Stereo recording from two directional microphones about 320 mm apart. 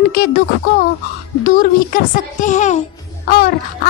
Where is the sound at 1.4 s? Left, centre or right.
Left.